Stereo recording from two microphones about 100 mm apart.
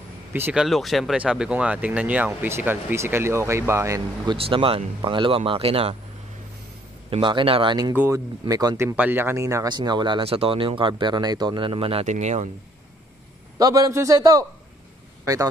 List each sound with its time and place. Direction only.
0.3 s speech: 20° right (ahead or behind)
0.6 s speech: centre (ahead or behind); by 4.0 s 25° right (ahead or behind)
4.4 s speech: 65° right (ahead or behind)
7.1 s speech: 55° right (ahead or behind)
8.1 s a man's voice: 40° right (ahead or behind)
8.7 s speech: 20° right (ahead or behind)
9.7 s speech: 45° right (ahead or behind)
10.2 s speech: 70° right (ahead or behind)
13.6 s a man's voice: 40° right (ahead or behind)